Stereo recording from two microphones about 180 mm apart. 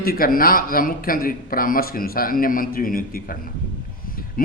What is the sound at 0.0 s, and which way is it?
A man's voice, 55° left (ahead or behind).